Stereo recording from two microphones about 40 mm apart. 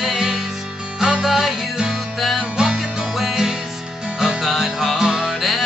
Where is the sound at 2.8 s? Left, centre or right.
Centre.